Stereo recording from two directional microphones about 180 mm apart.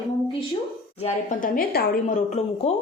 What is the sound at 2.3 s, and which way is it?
Speech, 35° left (ahead or behind).